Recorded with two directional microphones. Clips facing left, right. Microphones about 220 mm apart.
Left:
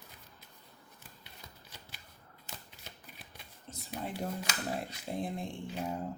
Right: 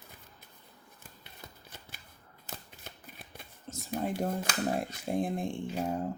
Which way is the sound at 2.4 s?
50° right (ahead or behind).